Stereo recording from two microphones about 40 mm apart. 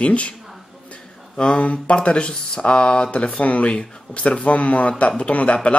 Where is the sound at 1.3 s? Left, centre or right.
Left.